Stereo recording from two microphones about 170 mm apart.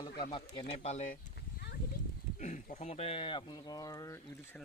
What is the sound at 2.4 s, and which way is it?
Speech, 45° left (ahead or behind).